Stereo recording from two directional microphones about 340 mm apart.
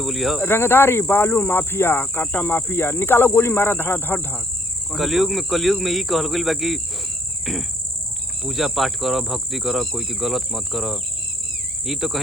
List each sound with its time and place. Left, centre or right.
0.0 s speech: centre